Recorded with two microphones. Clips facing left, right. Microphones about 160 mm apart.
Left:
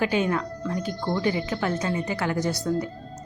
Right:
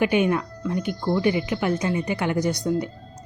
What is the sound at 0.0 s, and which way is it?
A woman's voice, 20° right (ahead or behind).